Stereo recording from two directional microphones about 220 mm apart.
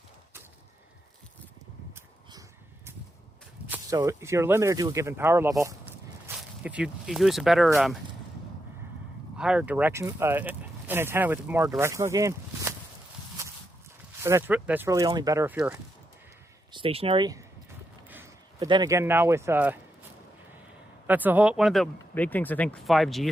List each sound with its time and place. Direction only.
3.7 s speech: 15° right (ahead or behind)
9.4 s speech: 5° right (ahead or behind)
14.2 s speech: 10° right (ahead or behind)
16.7 s speech: 25° right (ahead or behind)
18.1 s a sound: 10° right (ahead or behind)
18.7 s speech: 15° right (ahead or behind)
21.1 s speech: 10° right (ahead or behind)